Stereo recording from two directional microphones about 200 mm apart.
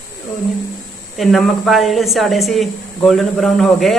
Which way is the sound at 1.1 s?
Centre (ahead or behind).